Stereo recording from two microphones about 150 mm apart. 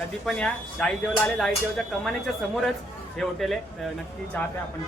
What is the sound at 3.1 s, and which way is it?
Speech, centre (ahead or behind).